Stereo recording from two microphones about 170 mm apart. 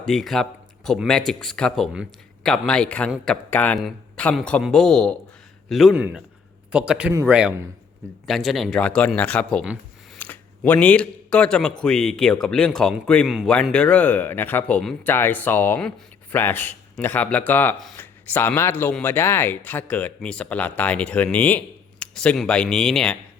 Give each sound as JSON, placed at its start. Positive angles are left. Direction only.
{"t": 0.0, "sound": "a man's voice", "side_deg": 5}
{"t": 7.1, "sound": "a man's voice", "side_deg": -20}
{"t": 8.3, "sound": "speech", "side_deg": 0}